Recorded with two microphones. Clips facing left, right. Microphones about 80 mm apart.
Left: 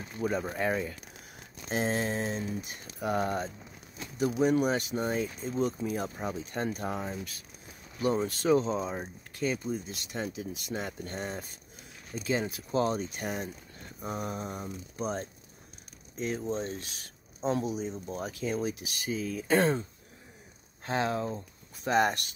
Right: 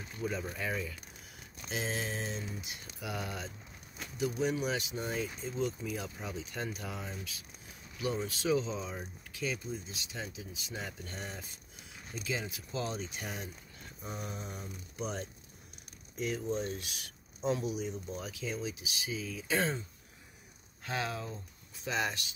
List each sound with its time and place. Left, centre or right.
0.2 s speech: left
10.9 s speech: left
20.8 s speech: left